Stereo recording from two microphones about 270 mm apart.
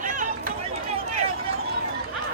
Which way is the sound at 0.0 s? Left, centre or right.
Right.